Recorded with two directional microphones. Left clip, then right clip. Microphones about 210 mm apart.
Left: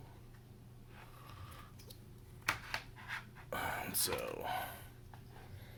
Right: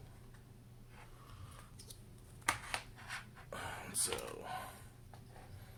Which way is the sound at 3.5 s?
30° left (ahead or behind).